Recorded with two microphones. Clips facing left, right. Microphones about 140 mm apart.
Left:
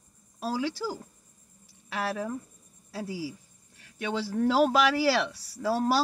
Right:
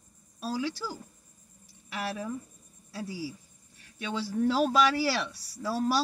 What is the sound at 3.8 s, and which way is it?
Speech, 85° left.